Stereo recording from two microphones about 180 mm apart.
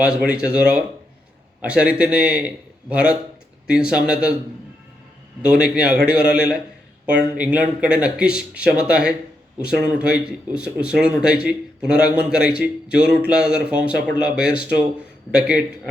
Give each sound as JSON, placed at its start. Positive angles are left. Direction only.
{"t": 0.0, "sound": "a man's voice", "side_deg": -5}
{"t": 5.4, "sound": "speech", "side_deg": -5}